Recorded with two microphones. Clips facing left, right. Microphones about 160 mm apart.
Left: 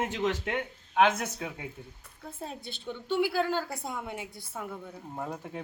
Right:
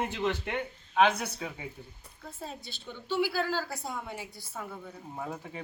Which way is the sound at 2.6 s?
55° left (ahead or behind).